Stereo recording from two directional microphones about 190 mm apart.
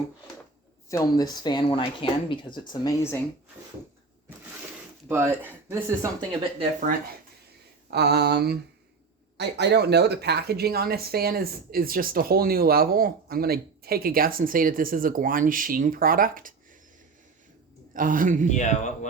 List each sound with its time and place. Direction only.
0.9 s speech: 20° left (ahead or behind)
5.0 s speech: 10° right (ahead or behind)
6.1 s speech: 30° right (ahead or behind)
7.9 s a sound: 60° right (ahead or behind)
9.4 s speech: 60° right (ahead or behind); by 16.6 s 45° right (ahead or behind)
17.9 s speech: 45° right (ahead or behind)
18.5 s speech: 40° left (ahead or behind)